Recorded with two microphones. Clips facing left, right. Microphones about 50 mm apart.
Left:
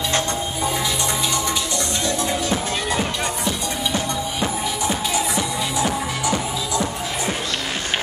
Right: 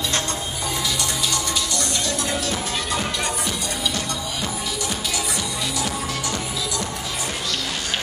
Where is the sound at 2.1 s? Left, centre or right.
Left.